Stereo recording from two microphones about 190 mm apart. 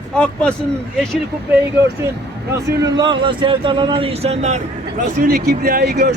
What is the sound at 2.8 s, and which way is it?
Speech, 25° right (ahead or behind).